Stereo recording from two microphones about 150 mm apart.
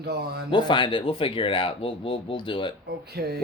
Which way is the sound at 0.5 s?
30° left (ahead or behind).